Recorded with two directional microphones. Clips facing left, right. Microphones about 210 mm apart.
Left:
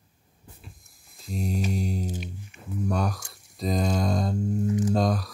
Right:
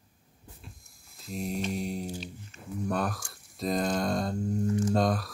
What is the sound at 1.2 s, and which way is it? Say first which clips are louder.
Mantra: left 3 dB; centre (ahead or behind).